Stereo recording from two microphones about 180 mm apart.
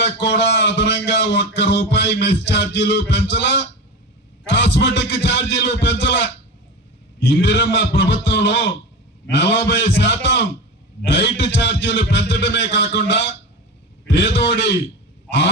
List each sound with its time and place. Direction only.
0.0 s speech: 80° left
7.3 s speech: 75° left (ahead or behind)